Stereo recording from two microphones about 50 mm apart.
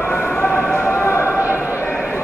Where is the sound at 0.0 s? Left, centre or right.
Left.